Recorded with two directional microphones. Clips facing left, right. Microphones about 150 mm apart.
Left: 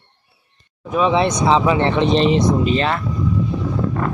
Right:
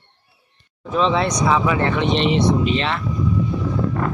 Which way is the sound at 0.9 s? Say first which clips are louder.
Left 2 dB; 15° left (ahead or behind).